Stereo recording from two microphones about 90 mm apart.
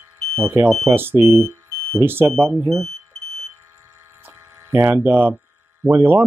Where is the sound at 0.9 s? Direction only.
25° right (ahead or behind).